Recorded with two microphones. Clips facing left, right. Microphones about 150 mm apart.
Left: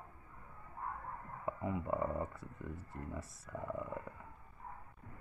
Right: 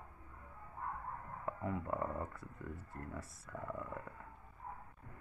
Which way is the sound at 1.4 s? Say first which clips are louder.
Left 2 dB; 5° left (ahead or behind).